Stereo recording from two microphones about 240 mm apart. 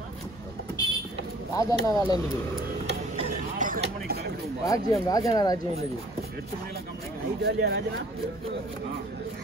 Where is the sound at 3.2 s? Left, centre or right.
Right.